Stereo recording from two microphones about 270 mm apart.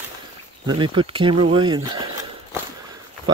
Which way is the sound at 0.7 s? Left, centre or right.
Centre.